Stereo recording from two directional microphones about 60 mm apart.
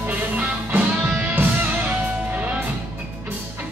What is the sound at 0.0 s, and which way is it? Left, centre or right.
Music, right.